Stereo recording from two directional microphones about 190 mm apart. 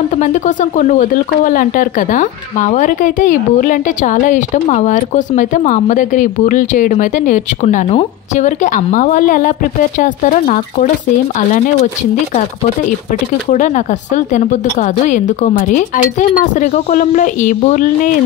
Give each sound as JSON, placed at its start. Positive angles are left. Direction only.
{"t": 0.1, "sound": "speech", "side_deg": 40}
{"t": 13.5, "sound": "a woman's voice", "side_deg": 40}